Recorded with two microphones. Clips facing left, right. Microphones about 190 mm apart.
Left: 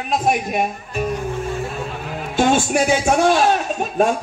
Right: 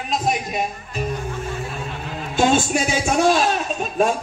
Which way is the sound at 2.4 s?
50° left (ahead or behind).